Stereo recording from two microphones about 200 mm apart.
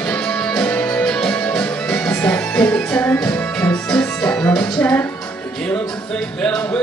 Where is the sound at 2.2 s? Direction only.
5° left (ahead or behind).